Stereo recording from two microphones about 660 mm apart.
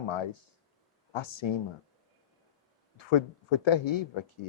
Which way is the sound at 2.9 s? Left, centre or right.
Left.